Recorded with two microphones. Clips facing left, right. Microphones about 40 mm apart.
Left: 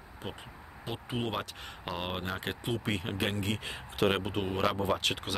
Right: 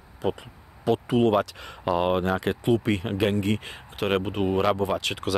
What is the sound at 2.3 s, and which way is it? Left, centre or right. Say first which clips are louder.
Speech: right 11 dB; right.